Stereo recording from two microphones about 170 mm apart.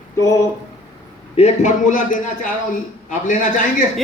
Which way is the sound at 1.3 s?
40° left (ahead or behind).